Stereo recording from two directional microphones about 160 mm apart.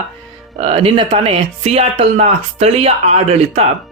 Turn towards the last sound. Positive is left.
turn(degrees=-45)  # may be behind; listen again after turning